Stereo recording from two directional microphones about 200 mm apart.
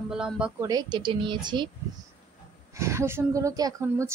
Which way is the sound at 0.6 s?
20° right (ahead or behind).